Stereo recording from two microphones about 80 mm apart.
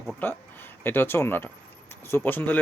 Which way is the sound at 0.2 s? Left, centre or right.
Left.